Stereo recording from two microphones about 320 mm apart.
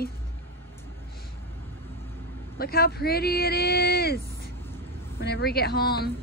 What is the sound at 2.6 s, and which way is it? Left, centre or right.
Speech, left.